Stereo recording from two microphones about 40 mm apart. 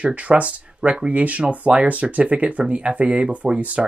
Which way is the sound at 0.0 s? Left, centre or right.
Right.